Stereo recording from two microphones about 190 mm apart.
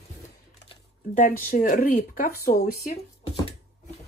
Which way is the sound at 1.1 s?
45° left (ahead or behind).